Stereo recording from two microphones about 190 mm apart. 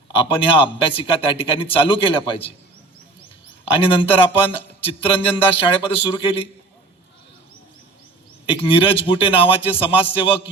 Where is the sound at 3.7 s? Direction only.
30° left (ahead or behind).